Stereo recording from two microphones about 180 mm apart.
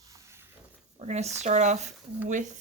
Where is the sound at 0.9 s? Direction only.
40° right (ahead or behind).